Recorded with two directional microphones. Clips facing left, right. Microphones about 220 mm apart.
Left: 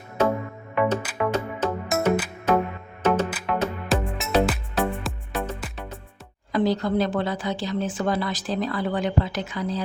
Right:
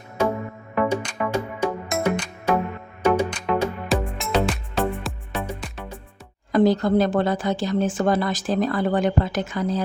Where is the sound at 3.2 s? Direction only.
5° left (ahead or behind).